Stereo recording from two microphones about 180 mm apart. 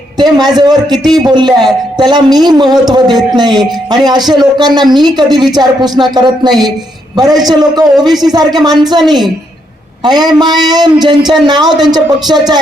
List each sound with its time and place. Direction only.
0.2 s a man's voice: 25° right (ahead or behind)
10.0 s a man's voice: 25° right (ahead or behind)